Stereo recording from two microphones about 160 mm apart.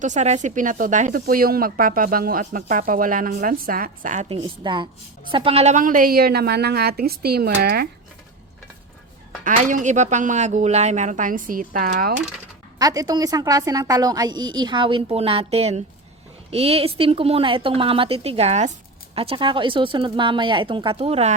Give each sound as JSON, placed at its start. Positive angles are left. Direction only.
{"t": 0.0, "sound": "speech", "side_deg": -50}
{"t": 4.3, "sound": "a woman's voice", "side_deg": -30}
{"t": 9.4, "sound": "speech", "side_deg": -55}
{"t": 12.8, "sound": "a woman's voice", "side_deg": -25}